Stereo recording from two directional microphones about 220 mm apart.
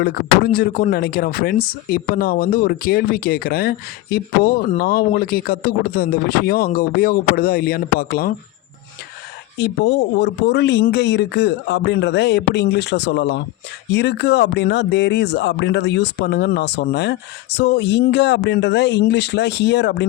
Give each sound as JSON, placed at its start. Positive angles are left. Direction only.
{"t": 0.0, "sound": "speech", "side_deg": 40}
{"t": 9.6, "sound": "speech", "side_deg": 50}